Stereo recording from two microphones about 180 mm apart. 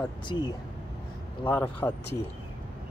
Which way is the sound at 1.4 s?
10° left (ahead or behind).